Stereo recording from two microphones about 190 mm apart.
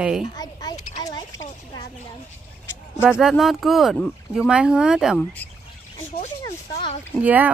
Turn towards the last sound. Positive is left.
turn(degrees=-10)  # may be behind; listen again after turning